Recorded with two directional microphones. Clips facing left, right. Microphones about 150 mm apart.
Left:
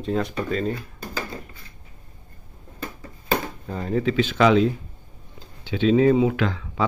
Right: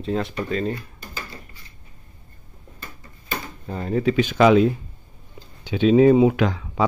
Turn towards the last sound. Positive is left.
turn(degrees=-15)  # may be behind; listen again after turning